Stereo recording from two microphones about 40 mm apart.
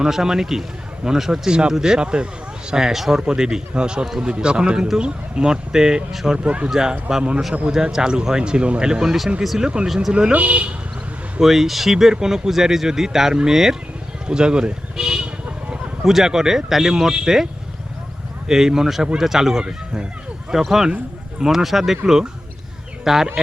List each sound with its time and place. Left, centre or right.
0.0 s speech: centre
6.3 s speech: right
6.7 s speech: centre
10.3 s speech: right
11.4 s speech: centre
14.3 s a sound: right
16.0 s speech: centre